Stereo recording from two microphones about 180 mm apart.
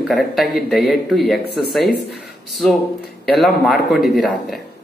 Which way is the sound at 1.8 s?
60° left (ahead or behind).